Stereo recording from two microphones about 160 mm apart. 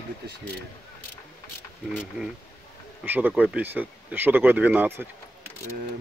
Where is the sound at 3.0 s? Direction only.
10° right (ahead or behind).